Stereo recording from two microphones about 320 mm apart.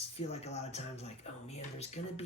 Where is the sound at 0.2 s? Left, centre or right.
Centre.